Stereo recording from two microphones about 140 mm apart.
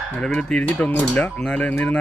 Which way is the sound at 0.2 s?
5° left (ahead or behind).